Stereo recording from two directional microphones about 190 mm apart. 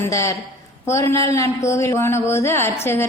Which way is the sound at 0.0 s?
15° left (ahead or behind).